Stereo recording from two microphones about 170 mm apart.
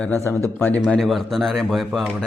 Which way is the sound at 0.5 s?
10° left (ahead or behind).